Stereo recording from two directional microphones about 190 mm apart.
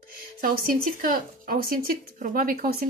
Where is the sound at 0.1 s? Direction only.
50° right (ahead or behind).